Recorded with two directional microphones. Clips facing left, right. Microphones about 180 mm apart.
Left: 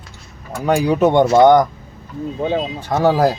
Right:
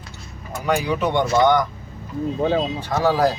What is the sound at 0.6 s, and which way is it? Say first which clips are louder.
Speech: left 6 dB; 40° left (ahead or behind).